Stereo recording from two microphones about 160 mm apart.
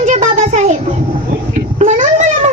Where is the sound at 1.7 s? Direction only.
45° right (ahead or behind).